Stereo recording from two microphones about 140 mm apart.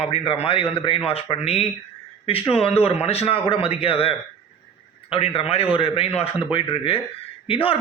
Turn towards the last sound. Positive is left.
turn(degrees=40)  # may be behind; listen again after turning